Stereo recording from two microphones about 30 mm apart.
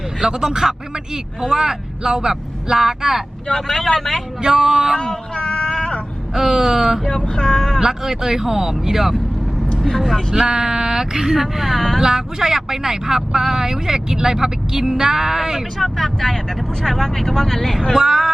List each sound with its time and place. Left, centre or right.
0.2 s speech: right
3.5 s speech: centre
4.4 s speech: centre
4.9 s child singing: left
6.3 s speech: centre
7.3 s speech: left
7.8 s speech: centre
10.5 s speech: right
11.3 s speech: centre
15.8 s speech: centre
18.0 s speech: centre